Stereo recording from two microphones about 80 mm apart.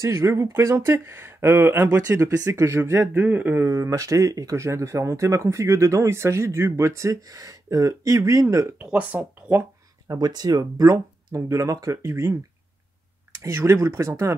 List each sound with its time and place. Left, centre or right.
0.0 s speech: right
2.0 s speech: right
2.6 s speech: right
3.6 s speech: right
8.7 s speech: centre
10.0 s speech: right
10.6 s speech: right
13.4 s speech: right